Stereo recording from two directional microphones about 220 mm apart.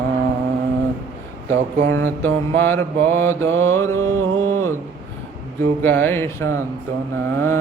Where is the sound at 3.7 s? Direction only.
10° left (ahead or behind).